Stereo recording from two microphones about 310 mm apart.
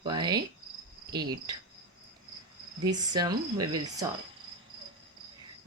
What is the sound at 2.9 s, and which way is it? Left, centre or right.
Speech, centre.